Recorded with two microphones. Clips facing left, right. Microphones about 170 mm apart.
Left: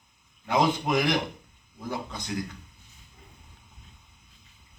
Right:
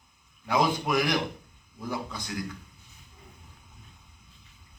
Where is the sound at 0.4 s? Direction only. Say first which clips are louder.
Left 1 dB; 25° left (ahead or behind).